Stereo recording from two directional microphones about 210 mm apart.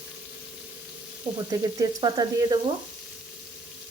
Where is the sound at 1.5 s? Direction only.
20° right (ahead or behind).